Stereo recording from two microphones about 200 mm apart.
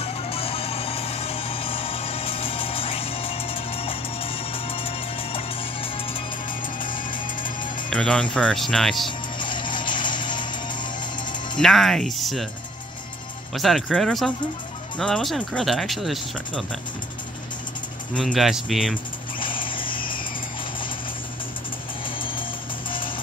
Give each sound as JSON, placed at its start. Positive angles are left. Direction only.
{"t": 0.0, "sound": "music", "side_deg": 30}
{"t": 6.8, "sound": "music", "side_deg": 40}
{"t": 7.9, "sound": "speech", "side_deg": 5}
{"t": 9.4, "sound": "music", "side_deg": 25}
{"t": 11.5, "sound": "speech", "side_deg": 0}
{"t": 13.6, "sound": "speech", "side_deg": 0}
{"t": 18.1, "sound": "speech", "side_deg": 0}
{"t": 19.4, "sound": "vehicle", "side_deg": 25}
{"t": 22.0, "sound": "music", "side_deg": 25}